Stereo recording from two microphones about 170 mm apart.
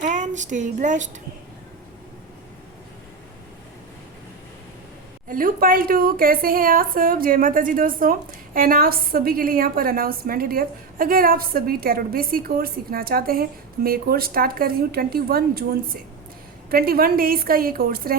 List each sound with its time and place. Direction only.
0.0 s child singing: 45° right (ahead or behind)
5.3 s a woman's voice: 55° right (ahead or behind)